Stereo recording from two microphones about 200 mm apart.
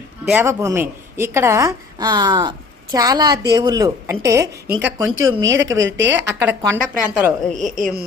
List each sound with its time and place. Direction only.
0.3 s a woman's voice: 10° right (ahead or behind)
5.0 s a woman's voice: 75° right (ahead or behind)
6.4 s a woman's voice: 10° right (ahead or behind)